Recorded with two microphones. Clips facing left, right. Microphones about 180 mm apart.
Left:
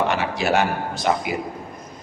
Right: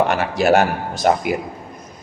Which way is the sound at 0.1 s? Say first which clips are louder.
Right 5 dB; 50° right (ahead or behind).